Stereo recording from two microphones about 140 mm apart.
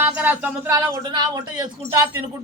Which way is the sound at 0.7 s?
30° right (ahead or behind).